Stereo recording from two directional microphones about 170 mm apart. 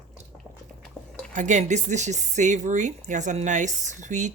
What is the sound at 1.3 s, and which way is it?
Speech, 45° right (ahead or behind).